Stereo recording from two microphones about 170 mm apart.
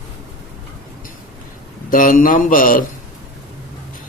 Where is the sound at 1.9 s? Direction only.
55° left (ahead or behind).